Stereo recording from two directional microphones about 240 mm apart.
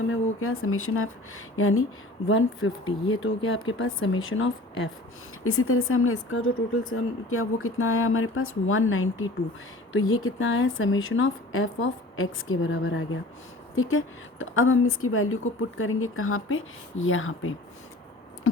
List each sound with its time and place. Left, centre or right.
0.0 s a woman's voice: left